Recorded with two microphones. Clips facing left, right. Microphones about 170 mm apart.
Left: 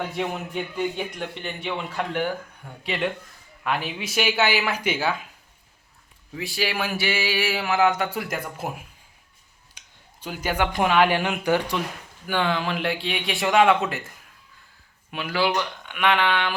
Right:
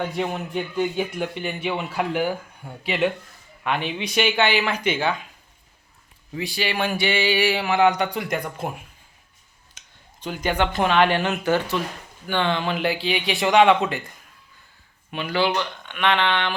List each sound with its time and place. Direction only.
0.2 s speech: centre (ahead or behind)
6.3 s speech: centre (ahead or behind)